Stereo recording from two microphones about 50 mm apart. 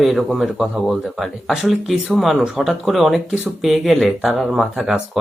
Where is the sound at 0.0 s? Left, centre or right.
Centre.